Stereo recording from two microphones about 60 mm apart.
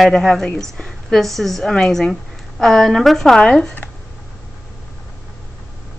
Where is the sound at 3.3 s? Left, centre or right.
Centre.